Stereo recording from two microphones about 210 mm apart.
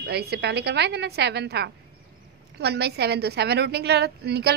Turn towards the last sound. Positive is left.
turn(degrees=-50)  # may be behind; listen again after turning